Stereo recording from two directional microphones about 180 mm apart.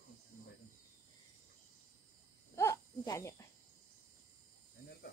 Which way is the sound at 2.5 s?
15° left (ahead or behind).